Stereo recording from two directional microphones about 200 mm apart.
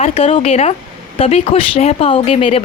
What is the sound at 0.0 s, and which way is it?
Speech, 30° left (ahead or behind).